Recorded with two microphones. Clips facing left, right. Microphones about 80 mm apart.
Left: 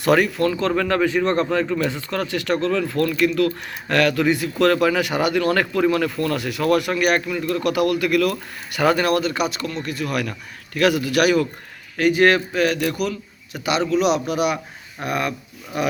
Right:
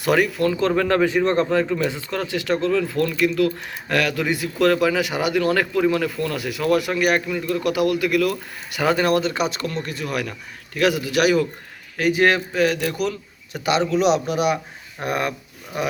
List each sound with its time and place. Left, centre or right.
0.0 s speech: centre
0.8 s speech: right
13.0 s speech: right